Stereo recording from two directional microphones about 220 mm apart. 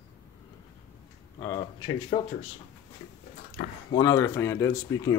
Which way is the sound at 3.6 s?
40° left (ahead or behind).